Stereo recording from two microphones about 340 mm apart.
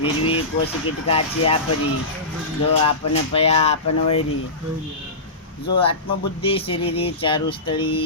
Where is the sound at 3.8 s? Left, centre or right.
Left.